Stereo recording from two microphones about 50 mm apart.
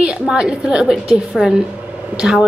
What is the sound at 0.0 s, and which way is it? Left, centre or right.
A woman's voice, centre.